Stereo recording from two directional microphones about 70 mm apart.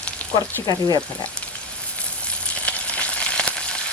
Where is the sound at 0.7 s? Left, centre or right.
Left.